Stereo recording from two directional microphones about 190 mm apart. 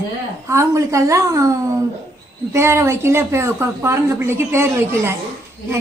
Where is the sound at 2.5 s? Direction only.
15° right (ahead or behind).